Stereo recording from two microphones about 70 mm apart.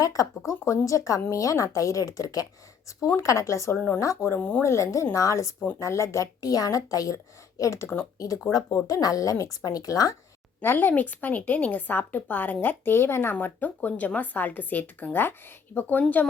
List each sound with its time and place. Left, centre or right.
0.0 s speech: left
3.2 s speech: left
4.4 s speech: left
4.6 s speech: left
7.6 s speech: left
8.2 s speech: left
10.6 s speech: left